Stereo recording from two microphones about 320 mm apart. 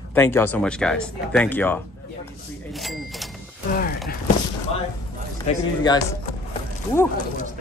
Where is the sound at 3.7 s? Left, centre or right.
Left.